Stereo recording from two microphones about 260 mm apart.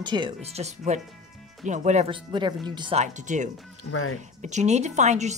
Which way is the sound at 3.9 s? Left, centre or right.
Left.